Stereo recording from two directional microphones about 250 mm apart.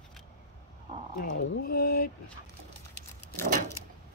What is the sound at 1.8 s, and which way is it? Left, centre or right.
Speech, left.